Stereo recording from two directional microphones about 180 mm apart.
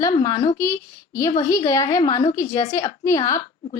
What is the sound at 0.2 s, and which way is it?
A woman's voice, 20° left (ahead or behind).